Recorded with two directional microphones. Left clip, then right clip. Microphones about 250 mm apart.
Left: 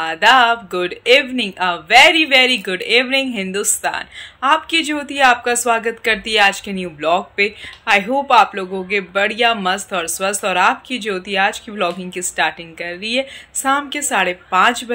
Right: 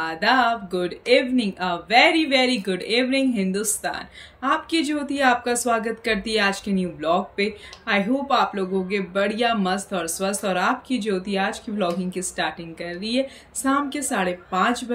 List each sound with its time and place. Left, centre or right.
0.0 s speech: centre